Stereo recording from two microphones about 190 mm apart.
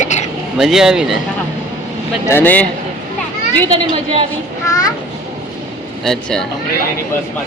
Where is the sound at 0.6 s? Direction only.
Centre (ahead or behind).